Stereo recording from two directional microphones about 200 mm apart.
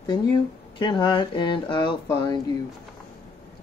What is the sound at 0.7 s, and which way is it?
Mantra, 25° left (ahead or behind).